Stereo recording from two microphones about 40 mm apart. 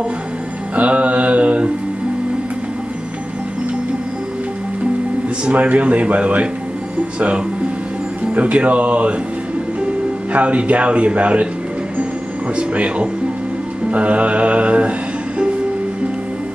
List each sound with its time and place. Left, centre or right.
0.7 s speech: right
5.5 s speech: right
10.3 s speech: right
12.5 s speech: right
13.8 s music: right